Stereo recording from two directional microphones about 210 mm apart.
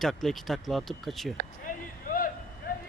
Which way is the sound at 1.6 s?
40° left (ahead or behind).